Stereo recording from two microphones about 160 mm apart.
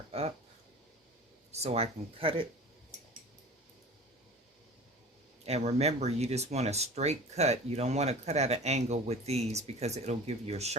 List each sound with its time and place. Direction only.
0.1 s a sound: 40° right (ahead or behind)
1.5 s speech: 40° right (ahead or behind)
5.5 s speech: 40° right (ahead or behind)